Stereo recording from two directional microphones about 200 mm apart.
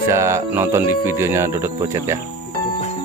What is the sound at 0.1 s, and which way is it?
Speech, 15° right (ahead or behind).